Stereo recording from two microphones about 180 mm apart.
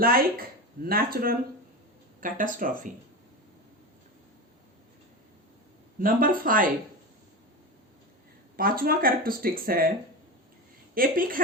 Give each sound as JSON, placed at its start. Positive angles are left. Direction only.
{"t": 0.0, "sound": "speech", "side_deg": -55}
{"t": 6.0, "sound": "speech", "side_deg": -50}
{"t": 8.5, "sound": "speech", "side_deg": -55}
{"t": 10.9, "sound": "speech", "side_deg": -50}